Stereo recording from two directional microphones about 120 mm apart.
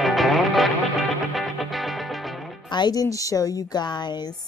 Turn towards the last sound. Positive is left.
turn(degrees=35)  # may be behind; listen again after turning